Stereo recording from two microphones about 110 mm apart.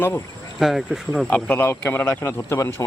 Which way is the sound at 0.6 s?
Centre (ahead or behind).